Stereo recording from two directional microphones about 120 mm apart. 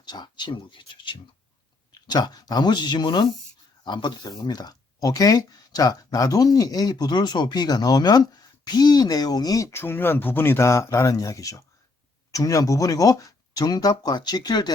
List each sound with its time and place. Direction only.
0.0 s speech: 35° left (ahead or behind)